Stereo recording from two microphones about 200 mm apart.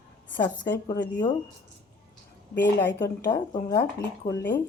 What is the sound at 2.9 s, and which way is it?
Speech, 60° left (ahead or behind).